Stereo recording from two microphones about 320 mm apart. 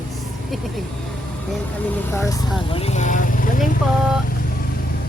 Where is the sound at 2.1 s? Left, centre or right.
Centre.